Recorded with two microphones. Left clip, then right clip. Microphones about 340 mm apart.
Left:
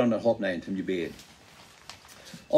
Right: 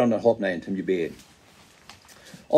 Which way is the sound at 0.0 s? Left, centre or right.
Right.